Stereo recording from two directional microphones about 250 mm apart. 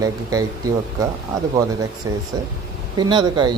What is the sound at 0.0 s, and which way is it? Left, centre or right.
Speech, centre.